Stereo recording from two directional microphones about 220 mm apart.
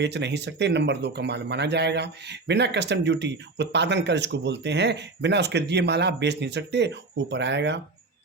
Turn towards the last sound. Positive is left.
turn(degrees=-50)  # may be behind; listen again after turning